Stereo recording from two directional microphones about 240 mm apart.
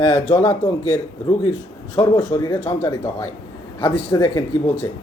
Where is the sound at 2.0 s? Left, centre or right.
Centre.